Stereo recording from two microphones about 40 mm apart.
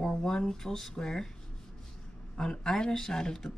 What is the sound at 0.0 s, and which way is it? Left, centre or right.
Speech, centre.